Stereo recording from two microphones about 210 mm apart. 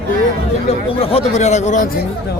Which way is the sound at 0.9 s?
30° left (ahead or behind).